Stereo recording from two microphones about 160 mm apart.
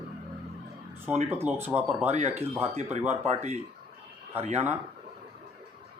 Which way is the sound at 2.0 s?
40° right (ahead or behind).